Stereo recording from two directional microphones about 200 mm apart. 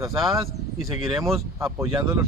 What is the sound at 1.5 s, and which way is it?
Speech, 15° right (ahead or behind).